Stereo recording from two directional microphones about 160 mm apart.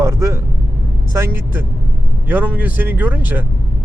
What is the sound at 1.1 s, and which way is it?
Speech, 15° right (ahead or behind).